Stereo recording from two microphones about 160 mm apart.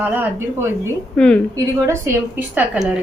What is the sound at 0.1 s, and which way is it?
Speech, 15° right (ahead or behind).